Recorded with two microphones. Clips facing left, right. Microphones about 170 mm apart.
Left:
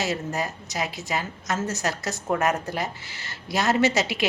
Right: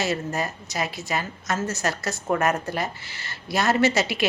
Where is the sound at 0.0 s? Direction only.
15° left (ahead or behind).